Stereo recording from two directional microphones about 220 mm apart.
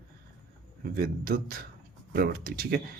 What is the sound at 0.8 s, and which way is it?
Speech, 45° right (ahead or behind).